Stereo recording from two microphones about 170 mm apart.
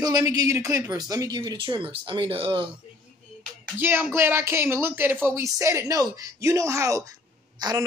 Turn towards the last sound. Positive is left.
turn(degrees=-25)  # may be behind; listen again after turning